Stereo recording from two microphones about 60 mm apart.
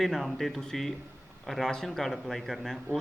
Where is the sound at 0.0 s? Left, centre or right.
Centre.